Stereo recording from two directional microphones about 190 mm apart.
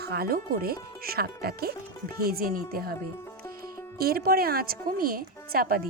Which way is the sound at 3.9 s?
55° right (ahead or behind).